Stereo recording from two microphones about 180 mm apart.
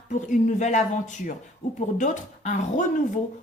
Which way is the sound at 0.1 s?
45° left (ahead or behind).